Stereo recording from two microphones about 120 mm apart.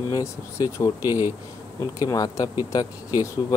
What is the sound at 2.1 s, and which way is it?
Speech, 30° left (ahead or behind).